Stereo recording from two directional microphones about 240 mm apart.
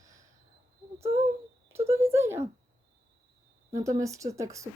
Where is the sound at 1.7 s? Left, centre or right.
Centre.